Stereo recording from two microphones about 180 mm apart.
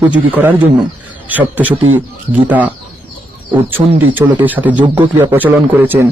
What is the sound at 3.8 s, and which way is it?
Speech, 20° right (ahead or behind).